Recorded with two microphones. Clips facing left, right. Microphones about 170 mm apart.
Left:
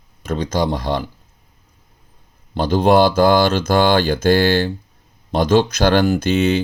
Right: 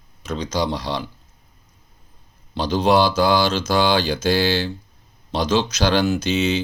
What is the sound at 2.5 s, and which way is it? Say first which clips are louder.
Speech: left 4 dB; 50° left (ahead or behind).